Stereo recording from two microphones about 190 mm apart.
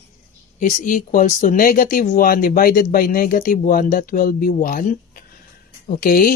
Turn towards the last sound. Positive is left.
turn(degrees=45)  # may be behind; listen again after turning